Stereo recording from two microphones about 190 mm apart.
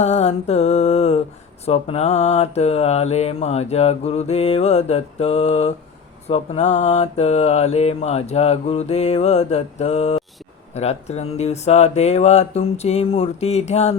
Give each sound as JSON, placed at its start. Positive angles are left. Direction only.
{"t": 0.0, "sound": "mantra", "side_deg": 35}